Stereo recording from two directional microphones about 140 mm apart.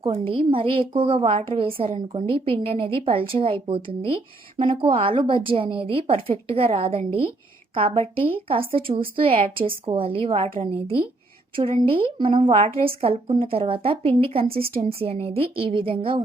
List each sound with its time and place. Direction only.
0.0 s a woman's voice: 40° right (ahead or behind)